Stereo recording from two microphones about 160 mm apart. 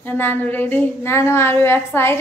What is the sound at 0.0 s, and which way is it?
A woman's voice, 10° left (ahead or behind).